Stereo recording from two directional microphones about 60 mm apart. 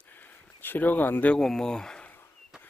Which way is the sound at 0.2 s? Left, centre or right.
Left.